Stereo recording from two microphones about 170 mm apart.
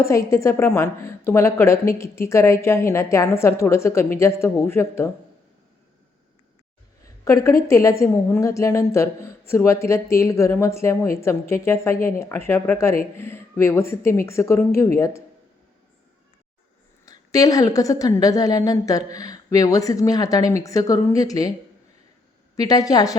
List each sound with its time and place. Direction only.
0.0 s a woman's voice: 15° left (ahead or behind)
7.0 s a woman's voice: 20° left (ahead or behind)
17.1 s a woman's voice: 20° left (ahead or behind)
22.5 s a woman's voice: 20° left (ahead or behind)